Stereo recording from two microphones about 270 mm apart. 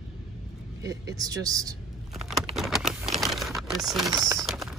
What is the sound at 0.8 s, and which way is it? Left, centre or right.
Speech, centre.